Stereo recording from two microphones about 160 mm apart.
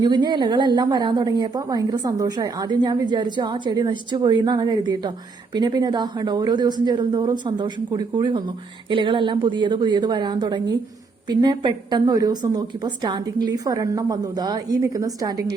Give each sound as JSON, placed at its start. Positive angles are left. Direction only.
{"t": 0.0, "sound": "speech", "side_deg": -25}